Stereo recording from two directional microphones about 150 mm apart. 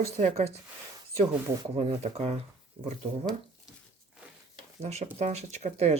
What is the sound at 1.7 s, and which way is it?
Speech, 45° right (ahead or behind).